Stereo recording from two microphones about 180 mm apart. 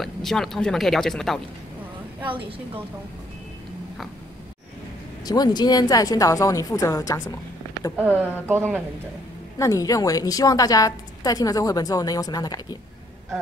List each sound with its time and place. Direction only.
0.0 s speech: centre (ahead or behind)
5.2 s a woman's voice: 20° left (ahead or behind)
8.2 s speech: 10° right (ahead or behind)
9.6 s a woman's voice: 20° left (ahead or behind)